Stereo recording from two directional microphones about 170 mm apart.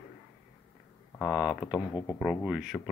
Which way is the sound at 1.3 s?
5° right (ahead or behind).